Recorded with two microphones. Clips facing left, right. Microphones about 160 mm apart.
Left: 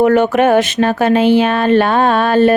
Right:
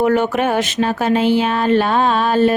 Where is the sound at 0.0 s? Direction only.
65° left (ahead or behind).